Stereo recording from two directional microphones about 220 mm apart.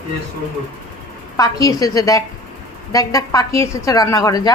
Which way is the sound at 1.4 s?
15° left (ahead or behind).